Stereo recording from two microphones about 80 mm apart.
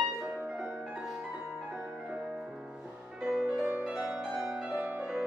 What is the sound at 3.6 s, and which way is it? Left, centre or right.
Music, right.